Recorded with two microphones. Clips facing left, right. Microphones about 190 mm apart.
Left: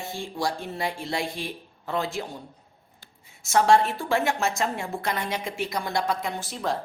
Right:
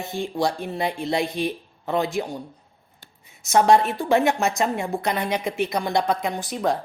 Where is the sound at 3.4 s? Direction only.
20° right (ahead or behind).